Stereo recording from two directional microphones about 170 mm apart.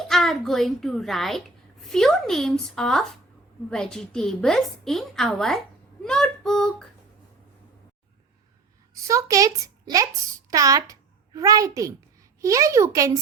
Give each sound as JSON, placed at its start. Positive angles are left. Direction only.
{"t": 0.1, "sound": "a woman's voice", "side_deg": 0}
{"t": 9.0, "sound": "speech", "side_deg": -20}